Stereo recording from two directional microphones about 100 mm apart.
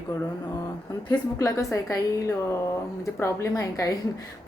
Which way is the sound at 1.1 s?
35° left (ahead or behind).